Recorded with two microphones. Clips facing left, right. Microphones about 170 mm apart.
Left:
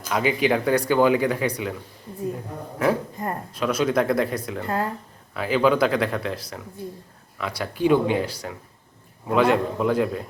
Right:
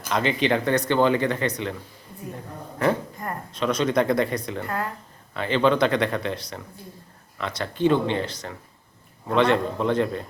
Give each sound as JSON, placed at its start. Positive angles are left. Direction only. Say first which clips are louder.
{"t": 0.1, "sound": "speech", "louder": "left 1 dB", "side_deg": 5}
{"t": 2.7, "sound": "speech", "louder": "left 1 dB", "side_deg": 5}
{"t": 4.6, "sound": "speech", "louder": "left 3 dB", "side_deg": 25}
{"t": 5.3, "sound": "speech", "louder": "left 1 dB", "side_deg": 5}